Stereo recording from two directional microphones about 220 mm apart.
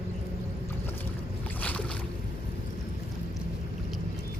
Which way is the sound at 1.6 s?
5° left (ahead or behind).